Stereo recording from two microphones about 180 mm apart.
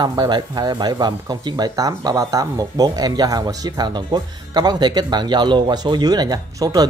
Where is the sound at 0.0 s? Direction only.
25° right (ahead or behind).